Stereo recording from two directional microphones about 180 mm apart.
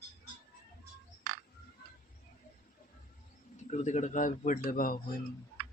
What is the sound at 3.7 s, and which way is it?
A man's voice, 40° left (ahead or behind).